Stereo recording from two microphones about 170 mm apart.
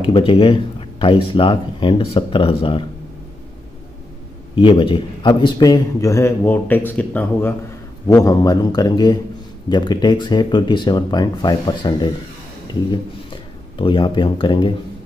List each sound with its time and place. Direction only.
0.0 s a man's voice: 30° left (ahead or behind)
4.6 s a man's voice: 30° left (ahead or behind); by 7.5 s 10° left (ahead or behind)
8.1 s a man's voice: 20° left (ahead or behind)